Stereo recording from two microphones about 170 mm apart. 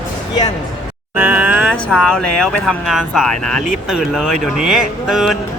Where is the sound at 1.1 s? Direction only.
15° right (ahead or behind).